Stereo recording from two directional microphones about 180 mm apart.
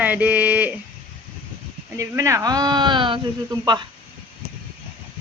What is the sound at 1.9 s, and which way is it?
Speech, 15° right (ahead or behind).